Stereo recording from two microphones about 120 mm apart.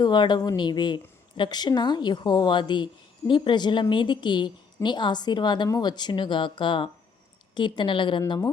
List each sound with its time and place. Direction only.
0.0 s a woman's voice: 40° left (ahead or behind)